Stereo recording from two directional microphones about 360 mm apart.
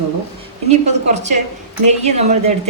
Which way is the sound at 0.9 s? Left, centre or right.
Centre.